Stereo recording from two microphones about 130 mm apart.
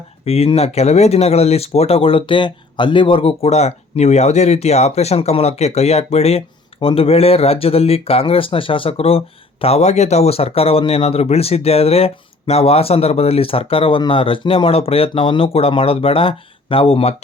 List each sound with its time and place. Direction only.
0.3 s speech: 50° left (ahead or behind)